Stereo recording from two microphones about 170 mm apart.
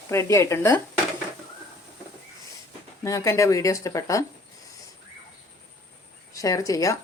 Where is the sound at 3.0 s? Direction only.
20° left (ahead or behind).